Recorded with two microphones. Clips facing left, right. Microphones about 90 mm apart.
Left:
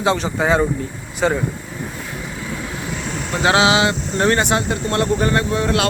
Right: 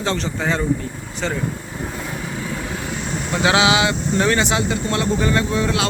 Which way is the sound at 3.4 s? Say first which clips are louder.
Left 2 dB; 35° left (ahead or behind).